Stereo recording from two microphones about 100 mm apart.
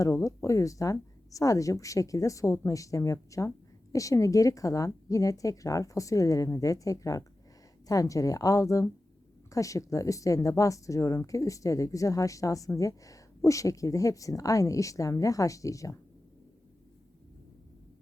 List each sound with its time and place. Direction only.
0.0 s speech: 30° left (ahead or behind)